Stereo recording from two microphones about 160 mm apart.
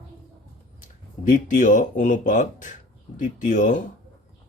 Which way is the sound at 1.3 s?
50° left (ahead or behind).